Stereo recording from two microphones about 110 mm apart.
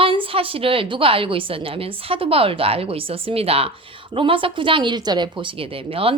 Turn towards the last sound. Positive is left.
turn(degrees=-55)  # may be behind; listen again after turning